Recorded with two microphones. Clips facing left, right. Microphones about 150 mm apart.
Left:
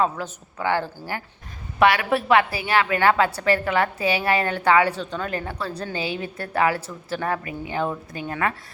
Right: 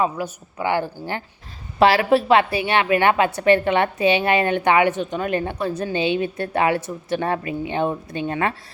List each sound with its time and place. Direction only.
0.0 s a woman's voice: 15° right (ahead or behind)